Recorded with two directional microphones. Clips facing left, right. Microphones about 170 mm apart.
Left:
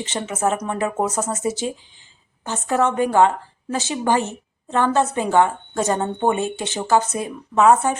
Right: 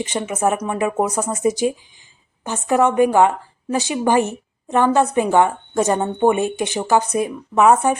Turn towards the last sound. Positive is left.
turn(degrees=-15)  # may be behind; listen again after turning